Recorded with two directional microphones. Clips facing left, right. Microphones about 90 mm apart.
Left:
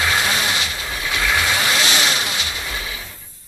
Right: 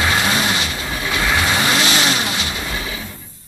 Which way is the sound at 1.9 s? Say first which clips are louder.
Right 2 dB; 35° right (ahead or behind).